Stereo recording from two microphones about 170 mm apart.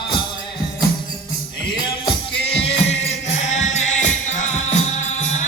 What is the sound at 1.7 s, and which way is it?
Music, 25° left (ahead or behind).